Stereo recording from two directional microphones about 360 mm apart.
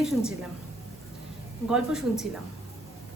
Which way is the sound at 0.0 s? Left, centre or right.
Centre.